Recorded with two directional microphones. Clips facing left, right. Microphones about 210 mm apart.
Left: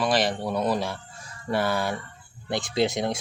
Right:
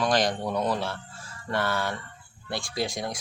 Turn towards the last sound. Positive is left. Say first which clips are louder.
# left 6 dB
turn(degrees=25)  # may be behind; listen again after turning